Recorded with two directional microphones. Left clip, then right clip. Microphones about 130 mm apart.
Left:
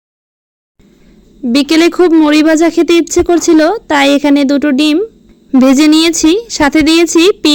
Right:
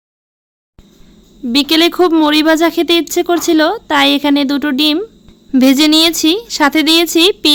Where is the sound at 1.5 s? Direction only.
45° left (ahead or behind).